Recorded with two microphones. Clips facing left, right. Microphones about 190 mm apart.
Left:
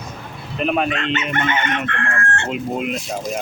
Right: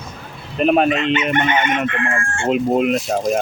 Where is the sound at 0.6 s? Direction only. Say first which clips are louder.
Right 5 dB; 45° right (ahead or behind).